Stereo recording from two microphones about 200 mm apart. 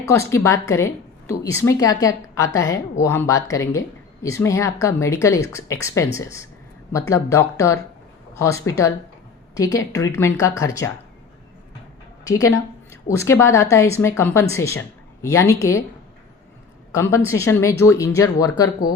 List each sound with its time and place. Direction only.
0.0 s speech: 15° left (ahead or behind)
12.2 s a woman's voice: 15° left (ahead or behind)
17.0 s speech: 15° left (ahead or behind)